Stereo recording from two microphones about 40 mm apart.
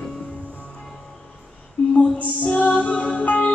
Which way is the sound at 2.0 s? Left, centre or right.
Left.